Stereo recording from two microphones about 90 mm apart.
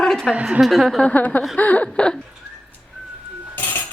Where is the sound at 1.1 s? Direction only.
15° left (ahead or behind).